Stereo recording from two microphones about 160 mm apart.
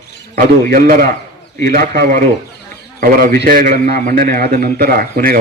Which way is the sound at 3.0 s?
65° right (ahead or behind).